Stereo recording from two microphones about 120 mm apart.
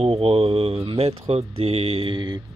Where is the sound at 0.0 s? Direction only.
55° right (ahead or behind).